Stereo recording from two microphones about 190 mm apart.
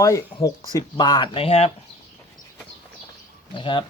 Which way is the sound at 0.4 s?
20° left (ahead or behind).